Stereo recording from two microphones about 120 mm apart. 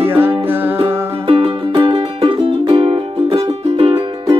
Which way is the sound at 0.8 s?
50° right (ahead or behind).